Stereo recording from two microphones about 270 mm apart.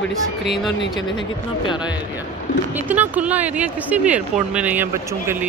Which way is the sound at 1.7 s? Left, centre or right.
Centre.